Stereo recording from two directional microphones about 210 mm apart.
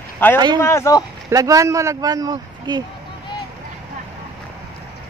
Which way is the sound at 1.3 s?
15° right (ahead or behind).